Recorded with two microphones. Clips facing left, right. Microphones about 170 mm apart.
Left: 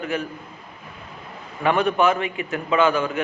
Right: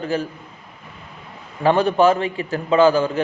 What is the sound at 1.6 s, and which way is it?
A man's voice, 30° right (ahead or behind).